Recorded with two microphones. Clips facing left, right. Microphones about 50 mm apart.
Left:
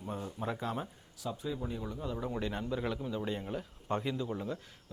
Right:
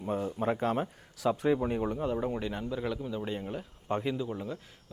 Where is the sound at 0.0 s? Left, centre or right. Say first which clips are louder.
Right 7 dB; right.